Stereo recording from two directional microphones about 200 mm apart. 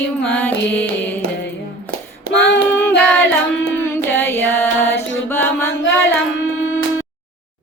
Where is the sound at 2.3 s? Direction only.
60° left (ahead or behind).